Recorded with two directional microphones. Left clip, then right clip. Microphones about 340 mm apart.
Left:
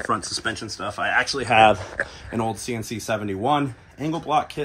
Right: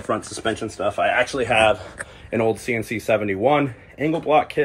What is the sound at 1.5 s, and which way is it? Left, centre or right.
Speech, left.